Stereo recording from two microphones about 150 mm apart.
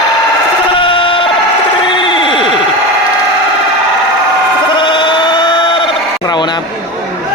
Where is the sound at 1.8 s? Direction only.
35° left (ahead or behind).